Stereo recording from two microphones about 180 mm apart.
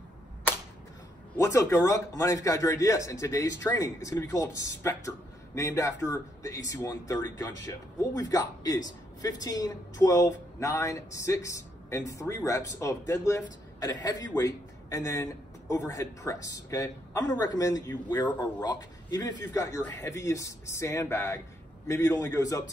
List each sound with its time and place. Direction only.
1.3 s a man's voice: 15° left (ahead or behind)